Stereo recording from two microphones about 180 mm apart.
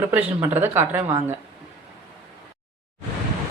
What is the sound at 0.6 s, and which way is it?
Speech, 10° right (ahead or behind).